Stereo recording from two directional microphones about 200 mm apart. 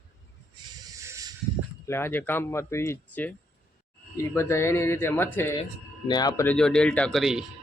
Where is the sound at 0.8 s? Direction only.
15° right (ahead or behind).